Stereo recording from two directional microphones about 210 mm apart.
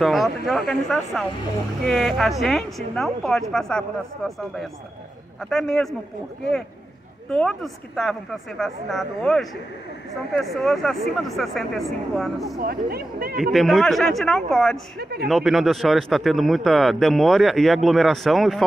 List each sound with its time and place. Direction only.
0.0 s speech: centre (ahead or behind)
7.2 s speech: 5° left (ahead or behind)
12.5 s speech: 45° right (ahead or behind)
13.4 s speech: centre (ahead or behind)
15.0 s speech: 50° right (ahead or behind)
15.2 s speech: centre (ahead or behind)